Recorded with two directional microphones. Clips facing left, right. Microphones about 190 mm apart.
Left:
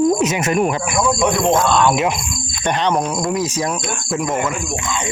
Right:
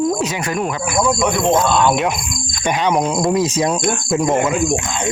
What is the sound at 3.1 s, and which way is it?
Speech, 25° right (ahead or behind).